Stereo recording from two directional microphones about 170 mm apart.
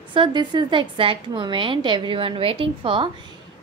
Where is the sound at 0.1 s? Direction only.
30° right (ahead or behind).